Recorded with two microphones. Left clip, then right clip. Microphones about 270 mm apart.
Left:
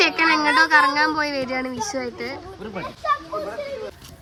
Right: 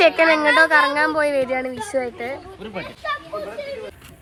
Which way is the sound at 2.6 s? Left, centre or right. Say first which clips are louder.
Even; centre.